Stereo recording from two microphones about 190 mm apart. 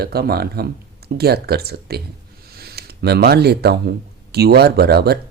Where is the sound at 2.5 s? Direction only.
55° right (ahead or behind).